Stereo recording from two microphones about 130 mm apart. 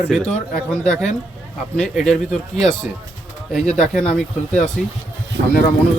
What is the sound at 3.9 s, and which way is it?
Speech, 5° left (ahead or behind).